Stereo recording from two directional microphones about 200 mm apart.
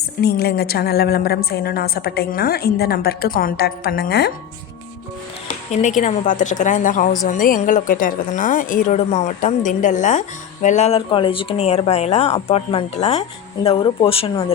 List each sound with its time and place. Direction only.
0.2 s a woman's voice: 50° left (ahead or behind)
5.5 s a woman's voice: 40° left (ahead or behind)